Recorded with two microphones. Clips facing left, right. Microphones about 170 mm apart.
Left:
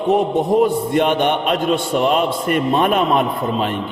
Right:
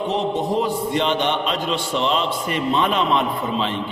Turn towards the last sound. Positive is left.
turn(degrees=50)  # may be behind; listen again after turning